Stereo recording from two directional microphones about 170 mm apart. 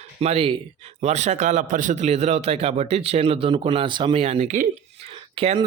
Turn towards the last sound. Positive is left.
turn(degrees=-30)  # may be behind; listen again after turning